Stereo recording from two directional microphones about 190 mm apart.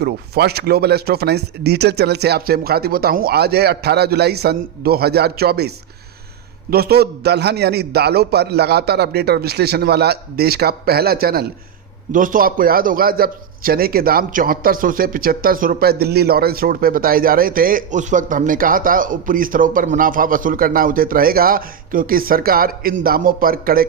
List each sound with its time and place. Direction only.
0.0 s a man's voice: 60° right (ahead or behind)